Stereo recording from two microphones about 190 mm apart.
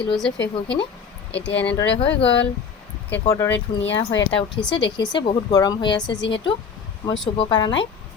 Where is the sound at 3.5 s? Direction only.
70° left (ahead or behind).